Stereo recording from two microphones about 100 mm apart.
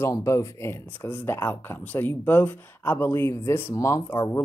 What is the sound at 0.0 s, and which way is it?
Speech, 30° left (ahead or behind).